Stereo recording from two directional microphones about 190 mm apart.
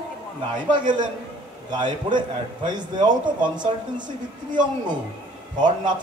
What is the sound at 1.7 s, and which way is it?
Speech, 25° right (ahead or behind).